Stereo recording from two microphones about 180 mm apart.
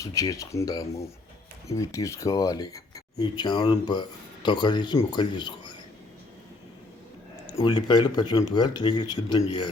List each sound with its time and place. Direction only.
0.0 s speech: 20° left (ahead or behind)
7.4 s speech: 25° left (ahead or behind)